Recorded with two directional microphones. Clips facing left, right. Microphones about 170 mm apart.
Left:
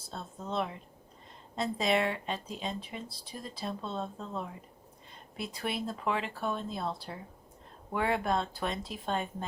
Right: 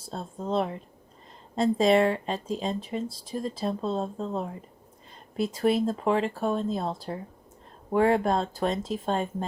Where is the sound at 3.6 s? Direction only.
30° right (ahead or behind).